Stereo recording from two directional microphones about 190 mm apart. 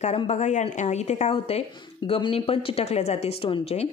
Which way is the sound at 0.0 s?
35° left (ahead or behind).